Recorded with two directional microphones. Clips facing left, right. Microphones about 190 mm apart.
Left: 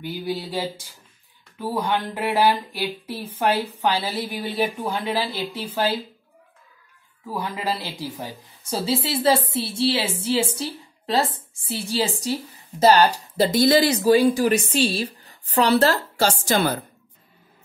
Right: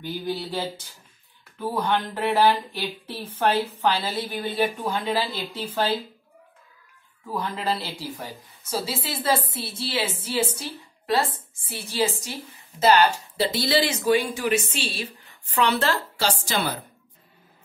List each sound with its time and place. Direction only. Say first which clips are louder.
0.0 s a woman's voice: left 1 dB; 10° left (ahead or behind)
7.2 s a woman's voice: even; 10° left (ahead or behind)
8.6 s a woman's voice: left 5 dB; 30° left (ahead or behind)
11.6 s speech: left 1 dB; 30° left (ahead or behind); by 16.7 s 45° left (ahead or behind)